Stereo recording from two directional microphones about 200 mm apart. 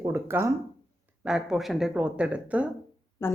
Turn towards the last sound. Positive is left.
turn(degrees=10)  # may be behind; listen again after turning